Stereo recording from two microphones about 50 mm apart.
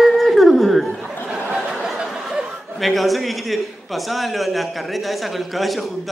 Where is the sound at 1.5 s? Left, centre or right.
Centre.